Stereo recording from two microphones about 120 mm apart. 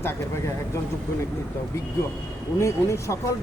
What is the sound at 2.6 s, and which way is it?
Speech, 25° left (ahead or behind).